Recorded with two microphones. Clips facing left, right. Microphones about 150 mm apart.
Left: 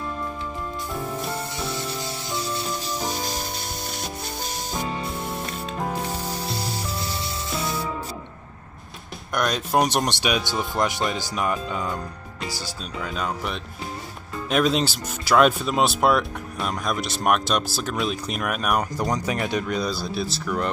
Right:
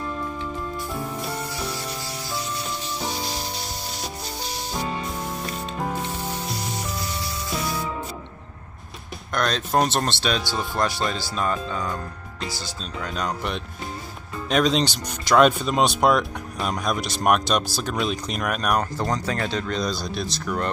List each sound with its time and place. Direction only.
3.1 s music: 45° left (ahead or behind)
9.3 s speech: 10° left (ahead or behind)